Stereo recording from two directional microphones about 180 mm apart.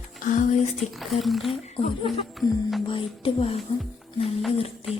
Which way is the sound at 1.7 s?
30° left (ahead or behind).